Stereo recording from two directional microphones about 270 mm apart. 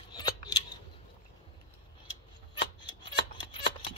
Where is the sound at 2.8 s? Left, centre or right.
Centre.